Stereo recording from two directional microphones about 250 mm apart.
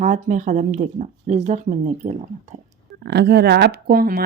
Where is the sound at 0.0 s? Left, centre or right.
Right.